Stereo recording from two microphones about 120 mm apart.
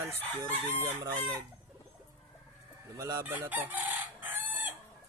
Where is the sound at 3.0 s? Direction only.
25° right (ahead or behind).